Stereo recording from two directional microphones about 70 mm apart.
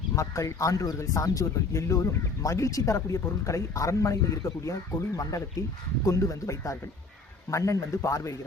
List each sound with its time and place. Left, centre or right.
0.2 s speech: left